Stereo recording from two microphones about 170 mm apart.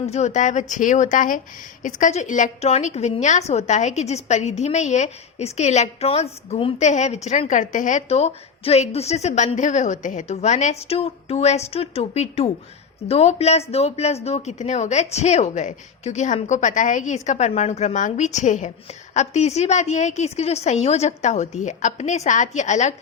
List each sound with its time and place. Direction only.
0.0 s a woman's voice: 40° left (ahead or behind)